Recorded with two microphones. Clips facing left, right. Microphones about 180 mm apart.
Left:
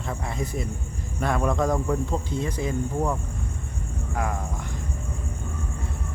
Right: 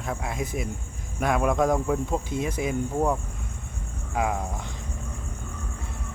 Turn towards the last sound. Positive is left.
turn(degrees=-15)  # may be behind; listen again after turning